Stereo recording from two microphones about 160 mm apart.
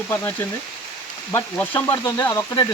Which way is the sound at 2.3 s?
25° left (ahead or behind).